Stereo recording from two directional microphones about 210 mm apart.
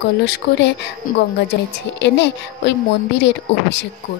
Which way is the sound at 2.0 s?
55° left (ahead or behind).